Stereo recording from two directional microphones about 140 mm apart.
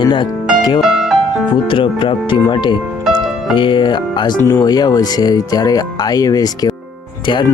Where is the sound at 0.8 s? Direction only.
Centre (ahead or behind).